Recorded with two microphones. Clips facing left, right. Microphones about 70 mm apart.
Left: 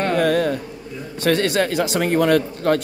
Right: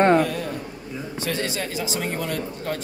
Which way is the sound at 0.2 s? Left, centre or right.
Left.